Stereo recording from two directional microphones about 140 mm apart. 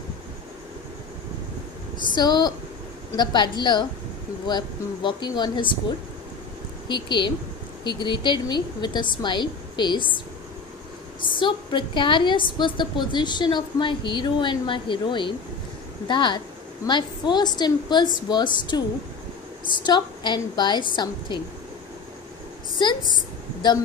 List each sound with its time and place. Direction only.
2.0 s a woman's voice: 30° left (ahead or behind)
6.9 s a woman's voice: 35° left (ahead or behind)
11.3 s a woman's voice: 35° left (ahead or behind)
22.8 s a woman's voice: 35° left (ahead or behind)